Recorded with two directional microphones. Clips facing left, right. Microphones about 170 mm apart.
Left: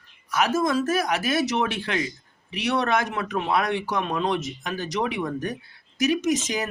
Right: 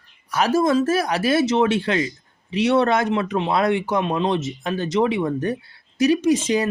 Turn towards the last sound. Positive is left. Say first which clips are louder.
# right 6 dB
turn(degrees=-30)  # may be behind; listen again after turning